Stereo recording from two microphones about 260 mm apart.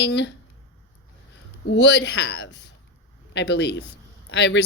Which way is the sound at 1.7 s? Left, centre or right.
Left.